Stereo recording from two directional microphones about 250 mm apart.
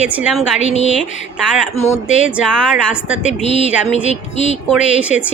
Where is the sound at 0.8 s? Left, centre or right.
Left.